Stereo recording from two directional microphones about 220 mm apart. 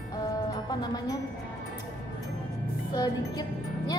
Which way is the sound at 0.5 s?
15° left (ahead or behind).